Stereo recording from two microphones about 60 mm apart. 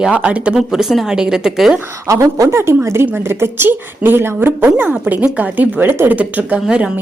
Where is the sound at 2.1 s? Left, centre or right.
Right.